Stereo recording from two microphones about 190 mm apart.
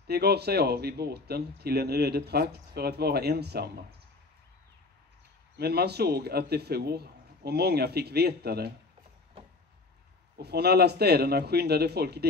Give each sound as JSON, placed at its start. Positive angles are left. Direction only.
{"t": 0.0, "sound": "speech", "side_deg": -55}
{"t": 5.6, "sound": "speech", "side_deg": -60}
{"t": 10.3, "sound": "speech", "side_deg": -60}